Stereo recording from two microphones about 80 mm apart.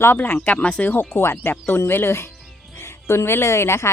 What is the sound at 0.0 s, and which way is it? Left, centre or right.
Speech, left.